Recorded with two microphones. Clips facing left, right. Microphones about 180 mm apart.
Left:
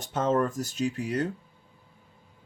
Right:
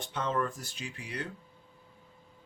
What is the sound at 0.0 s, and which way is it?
Speech, 45° left (ahead or behind).